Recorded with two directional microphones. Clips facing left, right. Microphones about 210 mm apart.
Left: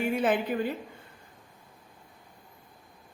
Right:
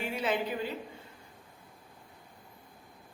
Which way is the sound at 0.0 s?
50° left (ahead or behind).